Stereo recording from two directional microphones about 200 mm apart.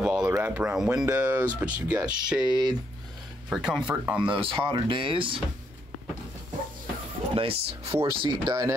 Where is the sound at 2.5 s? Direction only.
20° right (ahead or behind).